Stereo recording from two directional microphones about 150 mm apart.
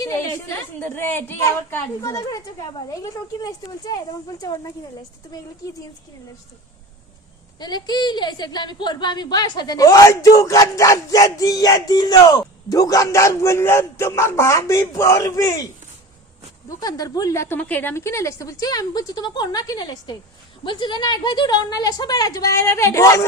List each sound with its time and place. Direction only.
0.0 s a woman's voice: 20° left (ahead or behind)
7.6 s a woman's voice: 30° left (ahead or behind)
16.6 s a woman's voice: 25° left (ahead or behind)